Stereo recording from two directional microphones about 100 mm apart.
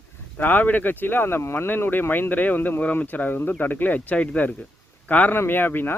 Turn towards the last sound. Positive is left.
turn(degrees=20)  # may be behind; listen again after turning